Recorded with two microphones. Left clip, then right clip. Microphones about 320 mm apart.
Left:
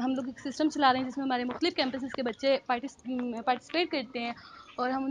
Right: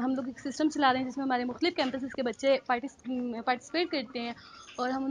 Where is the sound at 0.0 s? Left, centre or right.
Centre.